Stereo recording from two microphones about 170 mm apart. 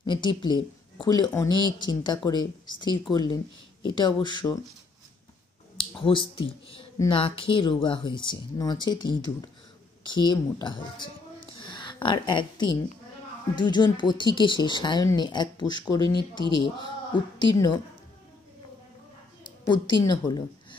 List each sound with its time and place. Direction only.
0.0 s speech: 25° left (ahead or behind)
5.8 s speech: 30° left (ahead or behind)
11.6 s a sound: 25° left (ahead or behind)
13.6 s speech: 25° left (ahead or behind)
19.6 s speech: 25° left (ahead or behind)